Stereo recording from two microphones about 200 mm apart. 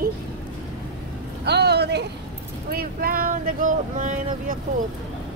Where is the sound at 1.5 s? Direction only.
55° right (ahead or behind).